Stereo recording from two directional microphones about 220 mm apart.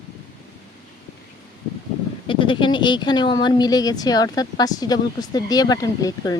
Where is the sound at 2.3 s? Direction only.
25° left (ahead or behind).